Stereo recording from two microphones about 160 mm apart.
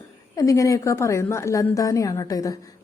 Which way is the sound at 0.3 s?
20° left (ahead or behind).